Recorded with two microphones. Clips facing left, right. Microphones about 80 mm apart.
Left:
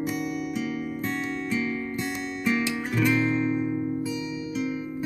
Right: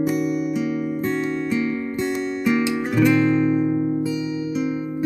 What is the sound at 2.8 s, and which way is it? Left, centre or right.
Guitar, centre.